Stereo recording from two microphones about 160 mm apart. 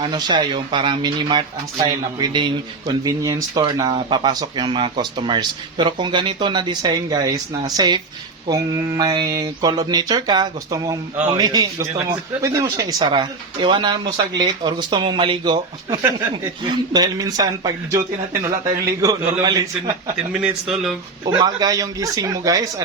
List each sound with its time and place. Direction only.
0.0 s speech: 30° right (ahead or behind)
21.2 s speech: 25° right (ahead or behind)